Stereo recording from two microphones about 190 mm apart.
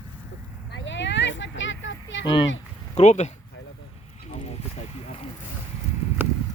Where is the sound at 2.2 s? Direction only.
25° left (ahead or behind).